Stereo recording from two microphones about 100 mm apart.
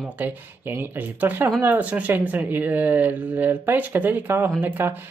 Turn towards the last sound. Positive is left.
turn(degrees=-20)  # may be behind; listen again after turning